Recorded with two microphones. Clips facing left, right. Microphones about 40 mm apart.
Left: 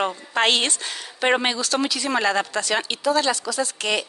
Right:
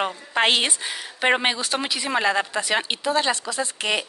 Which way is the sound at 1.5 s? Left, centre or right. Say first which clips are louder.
Left 2 dB; right.